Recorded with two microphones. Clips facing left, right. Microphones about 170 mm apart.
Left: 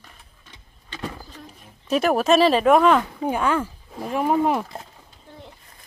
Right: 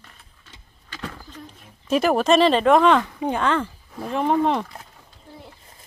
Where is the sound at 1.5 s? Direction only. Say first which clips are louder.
Right 1 dB; centre (ahead or behind).